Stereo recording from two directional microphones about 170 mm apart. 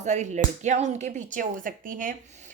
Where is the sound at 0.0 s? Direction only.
45° right (ahead or behind).